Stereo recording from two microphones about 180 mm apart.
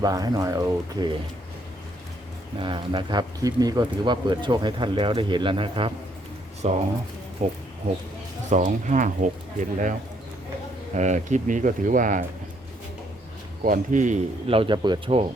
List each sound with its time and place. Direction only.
0.0 s speech: 20° right (ahead or behind)
2.6 s speech: 30° right (ahead or behind); by 9.9 s 45° right (ahead or behind)
10.9 s speech: 40° right (ahead or behind)
13.7 s speech: 45° right (ahead or behind); by 15.2 s 30° right (ahead or behind)